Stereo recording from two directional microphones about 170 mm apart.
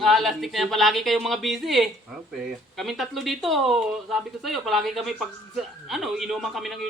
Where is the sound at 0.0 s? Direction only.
Centre (ahead or behind).